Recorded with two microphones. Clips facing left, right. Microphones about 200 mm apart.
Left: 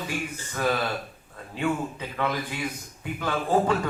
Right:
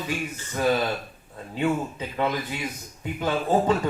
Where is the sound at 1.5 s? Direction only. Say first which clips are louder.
Right 2 dB; 20° right (ahead or behind).